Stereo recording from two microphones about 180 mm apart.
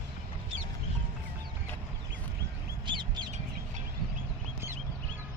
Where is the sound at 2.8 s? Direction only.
25° right (ahead or behind).